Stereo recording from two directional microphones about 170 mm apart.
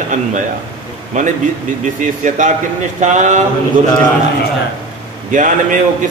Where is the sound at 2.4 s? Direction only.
50° right (ahead or behind).